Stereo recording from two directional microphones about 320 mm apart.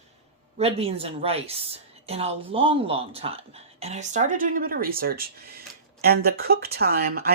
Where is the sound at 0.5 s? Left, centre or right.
Centre.